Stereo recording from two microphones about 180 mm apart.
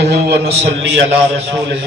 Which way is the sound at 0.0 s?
65° right (ahead or behind).